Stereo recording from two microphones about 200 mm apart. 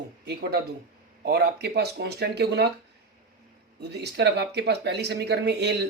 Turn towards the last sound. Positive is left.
turn(degrees=-55)  # may be behind; listen again after turning